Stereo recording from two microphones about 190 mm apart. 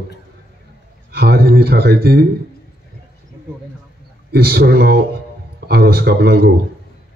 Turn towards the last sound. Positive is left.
turn(degrees=-55)  # may be behind; listen again after turning